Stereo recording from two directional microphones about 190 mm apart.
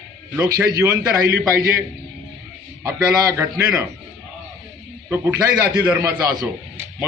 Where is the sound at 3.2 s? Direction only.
15° right (ahead or behind).